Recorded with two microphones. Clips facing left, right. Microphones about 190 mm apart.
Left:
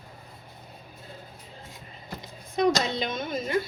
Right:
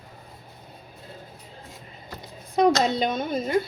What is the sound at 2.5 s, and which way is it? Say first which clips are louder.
Speech: right 4 dB; 35° right (ahead or behind).